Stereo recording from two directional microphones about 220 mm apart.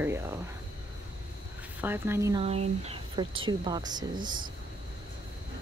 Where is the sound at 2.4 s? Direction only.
30° right (ahead or behind).